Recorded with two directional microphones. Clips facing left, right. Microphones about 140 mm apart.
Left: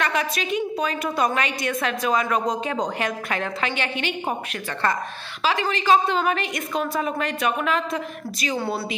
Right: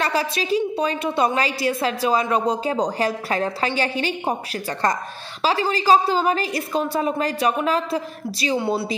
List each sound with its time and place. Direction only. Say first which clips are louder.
0.0 s a woman's voice: right 2 dB; 30° right (ahead or behind)